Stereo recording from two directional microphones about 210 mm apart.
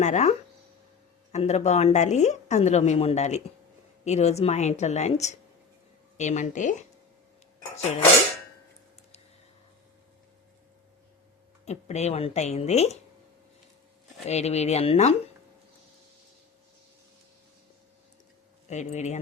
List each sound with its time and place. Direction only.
0.0 s a woman's voice: 35° left (ahead or behind)
11.6 s a woman's voice: 30° left (ahead or behind)
14.3 s a woman's voice: 30° left (ahead or behind)
18.7 s a woman's voice: 35° left (ahead or behind)